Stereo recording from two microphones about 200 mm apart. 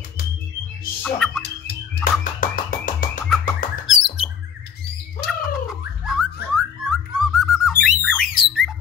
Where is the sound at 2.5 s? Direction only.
45° left (ahead or behind).